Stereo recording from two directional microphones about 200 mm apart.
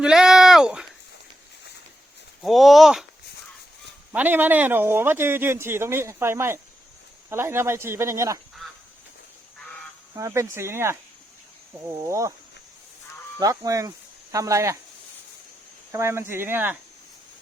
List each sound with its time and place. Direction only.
0.0 s a sound: 5° right (ahead or behind)
2.4 s speech: centre (ahead or behind)
4.1 s speech: 10° right (ahead or behind)
10.2 s speech: 15° right (ahead or behind)
13.4 s speech: 15° right (ahead or behind)
15.9 s speech: 15° right (ahead or behind)